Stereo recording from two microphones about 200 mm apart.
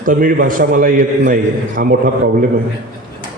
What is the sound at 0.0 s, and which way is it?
A man's voice, 45° right (ahead or behind).